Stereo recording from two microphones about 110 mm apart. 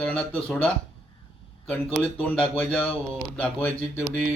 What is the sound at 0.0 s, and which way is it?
Speech, 10° left (ahead or behind).